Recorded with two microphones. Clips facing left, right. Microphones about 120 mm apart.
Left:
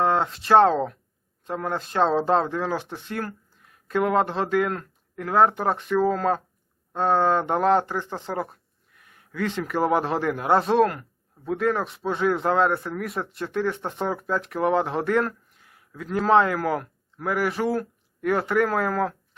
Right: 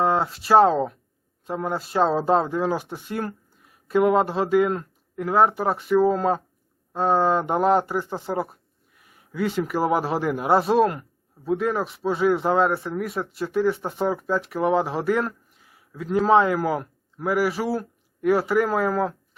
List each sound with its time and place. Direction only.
0.0 s a man's voice: 5° right (ahead or behind)